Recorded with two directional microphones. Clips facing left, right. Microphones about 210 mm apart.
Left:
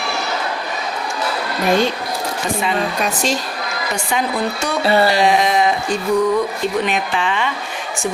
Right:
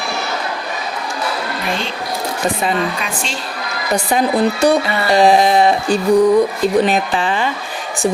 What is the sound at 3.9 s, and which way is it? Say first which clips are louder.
Speech: right 6 dB; 35° right (ahead or behind).